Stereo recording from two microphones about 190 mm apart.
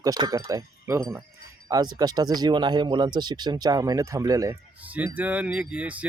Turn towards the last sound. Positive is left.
turn(degrees=-5)  # may be behind; listen again after turning